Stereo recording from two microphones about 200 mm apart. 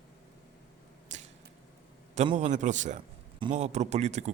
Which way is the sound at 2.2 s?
35° right (ahead or behind).